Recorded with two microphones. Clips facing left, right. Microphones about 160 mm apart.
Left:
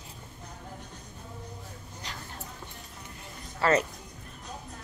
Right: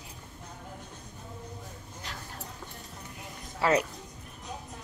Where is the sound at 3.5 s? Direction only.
10° right (ahead or behind).